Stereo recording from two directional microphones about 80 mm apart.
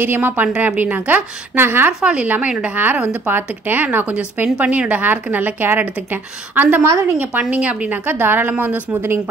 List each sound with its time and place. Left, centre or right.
0.0 s speech: right
2.0 s a woman's voice: centre